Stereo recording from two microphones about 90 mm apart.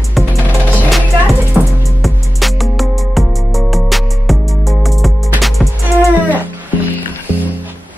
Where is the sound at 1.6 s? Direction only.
15° right (ahead or behind).